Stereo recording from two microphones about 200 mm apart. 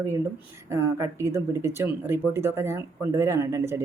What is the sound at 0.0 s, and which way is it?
Speech, 15° right (ahead or behind).